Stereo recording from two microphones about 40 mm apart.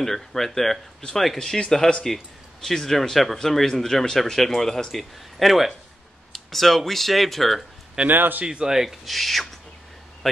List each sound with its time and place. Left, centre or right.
0.0 s speech: centre
8.1 s speech: right
8.5 s speech: centre